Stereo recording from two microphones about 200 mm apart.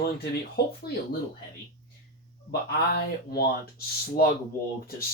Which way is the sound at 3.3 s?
50° left (ahead or behind).